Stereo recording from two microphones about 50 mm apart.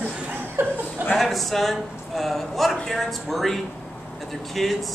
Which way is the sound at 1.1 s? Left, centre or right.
Centre.